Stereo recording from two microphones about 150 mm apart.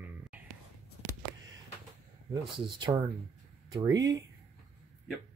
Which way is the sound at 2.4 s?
30° right (ahead or behind).